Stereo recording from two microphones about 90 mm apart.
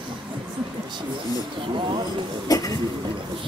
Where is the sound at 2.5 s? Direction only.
45° left (ahead or behind).